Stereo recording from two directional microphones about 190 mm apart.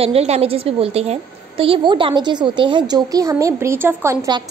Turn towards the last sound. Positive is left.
turn(degrees=-15)  # may be behind; listen again after turning